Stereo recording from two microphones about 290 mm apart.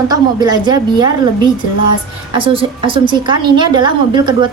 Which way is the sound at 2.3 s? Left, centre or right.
Centre.